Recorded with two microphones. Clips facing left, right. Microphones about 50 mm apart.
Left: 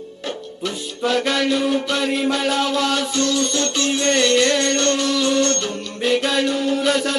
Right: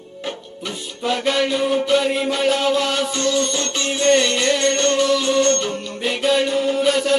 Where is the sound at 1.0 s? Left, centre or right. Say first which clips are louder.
Left 1 dB; centre.